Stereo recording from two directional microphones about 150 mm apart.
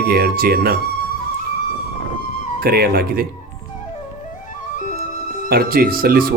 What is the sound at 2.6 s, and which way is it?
Speech, 90° right.